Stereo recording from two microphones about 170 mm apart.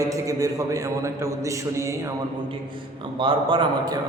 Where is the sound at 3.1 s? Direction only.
30° right (ahead or behind).